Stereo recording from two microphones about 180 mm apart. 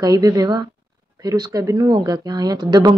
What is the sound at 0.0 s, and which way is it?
Speech, 20° right (ahead or behind).